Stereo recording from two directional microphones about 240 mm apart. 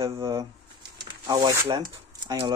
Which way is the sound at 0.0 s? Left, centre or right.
Centre.